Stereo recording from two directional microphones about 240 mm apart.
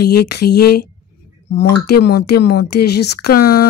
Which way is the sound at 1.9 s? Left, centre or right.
Left.